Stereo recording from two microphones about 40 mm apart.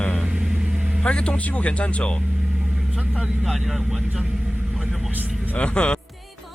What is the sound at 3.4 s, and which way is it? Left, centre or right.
Speech, centre.